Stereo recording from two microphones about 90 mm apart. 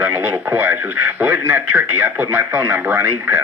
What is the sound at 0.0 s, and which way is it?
A man's voice, 20° right (ahead or behind).